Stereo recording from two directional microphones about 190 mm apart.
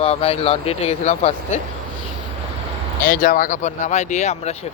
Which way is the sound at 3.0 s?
45° left (ahead or behind).